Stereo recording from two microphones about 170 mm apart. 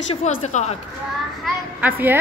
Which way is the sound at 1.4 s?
10° right (ahead or behind).